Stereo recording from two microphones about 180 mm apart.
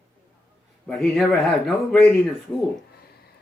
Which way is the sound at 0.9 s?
Centre (ahead or behind).